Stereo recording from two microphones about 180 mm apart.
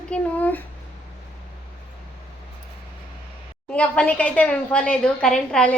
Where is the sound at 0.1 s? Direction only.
10° left (ahead or behind).